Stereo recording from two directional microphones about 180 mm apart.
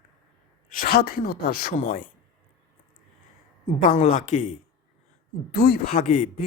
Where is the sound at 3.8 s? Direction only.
45° left (ahead or behind).